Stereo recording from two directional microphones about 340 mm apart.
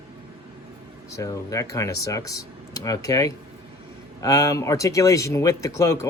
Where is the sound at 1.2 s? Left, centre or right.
Centre.